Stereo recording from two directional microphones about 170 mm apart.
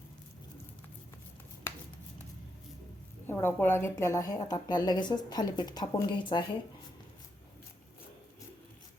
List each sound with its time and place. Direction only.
3.2 s a woman's voice: 15° left (ahead or behind)